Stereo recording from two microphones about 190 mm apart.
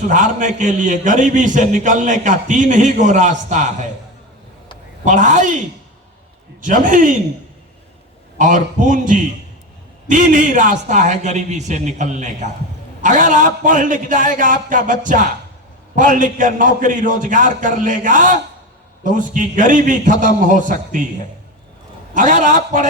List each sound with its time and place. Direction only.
0.1 s a man's voice: 40° right (ahead or behind)
5.0 s a man's voice: 40° right (ahead or behind)
6.6 s a man's voice: 45° right (ahead or behind)
8.4 s a man's voice: 40° right (ahead or behind)
22.1 s a man's voice: 40° right (ahead or behind)